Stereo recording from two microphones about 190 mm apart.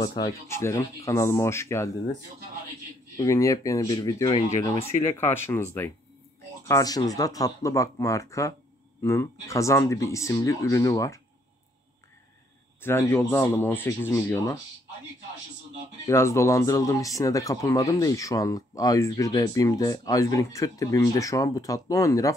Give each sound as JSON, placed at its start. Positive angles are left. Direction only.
{"t": 0.0, "sound": "speech", "side_deg": 20}
{"t": 3.2, "sound": "speech", "side_deg": 15}
{"t": 12.8, "sound": "speech", "side_deg": 10}
{"t": 16.1, "sound": "speech", "side_deg": 15}